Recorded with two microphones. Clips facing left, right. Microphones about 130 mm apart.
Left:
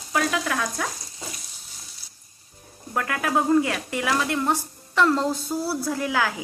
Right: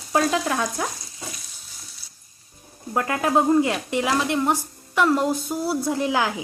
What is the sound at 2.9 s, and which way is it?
A woman's voice, 25° right (ahead or behind).